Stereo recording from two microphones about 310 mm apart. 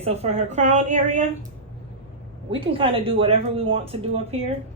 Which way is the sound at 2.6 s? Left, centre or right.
Centre.